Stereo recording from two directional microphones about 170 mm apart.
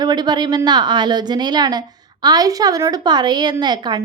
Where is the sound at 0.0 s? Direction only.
25° right (ahead or behind).